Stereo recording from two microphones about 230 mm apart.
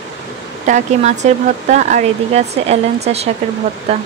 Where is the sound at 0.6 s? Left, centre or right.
Right.